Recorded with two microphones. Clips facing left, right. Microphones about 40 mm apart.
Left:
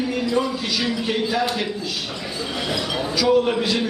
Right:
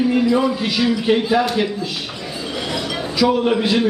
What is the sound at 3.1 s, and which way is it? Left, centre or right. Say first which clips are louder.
Speech: right 2 dB; centre.